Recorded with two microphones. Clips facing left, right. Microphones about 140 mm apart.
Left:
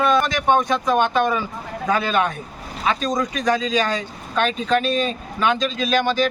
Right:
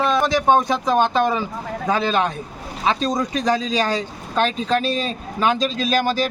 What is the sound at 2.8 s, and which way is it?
Speech, 30° right (ahead or behind).